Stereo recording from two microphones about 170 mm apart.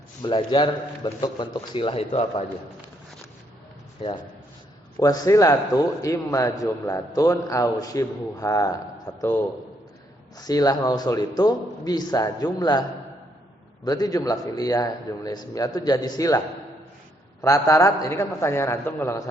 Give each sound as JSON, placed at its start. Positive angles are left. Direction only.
{"t": 0.2, "sound": "a man's voice", "side_deg": 30}
{"t": 4.0, "sound": "a man's voice", "side_deg": 30}
{"t": 4.9, "sound": "a man's voice", "side_deg": 20}
{"t": 10.3, "sound": "a man's voice", "side_deg": 20}
{"t": 13.8, "sound": "a man's voice", "side_deg": 20}
{"t": 17.4, "sound": "a man's voice", "side_deg": 20}